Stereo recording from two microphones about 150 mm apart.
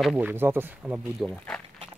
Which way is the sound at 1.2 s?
5° left (ahead or behind).